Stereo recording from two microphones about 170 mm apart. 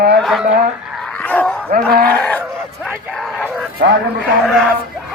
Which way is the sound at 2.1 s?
10° left (ahead or behind).